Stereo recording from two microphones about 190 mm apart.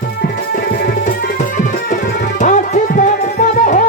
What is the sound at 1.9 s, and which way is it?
Music, 40° left (ahead or behind).